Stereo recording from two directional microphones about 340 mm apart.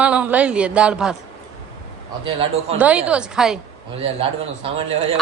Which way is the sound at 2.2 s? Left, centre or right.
Centre.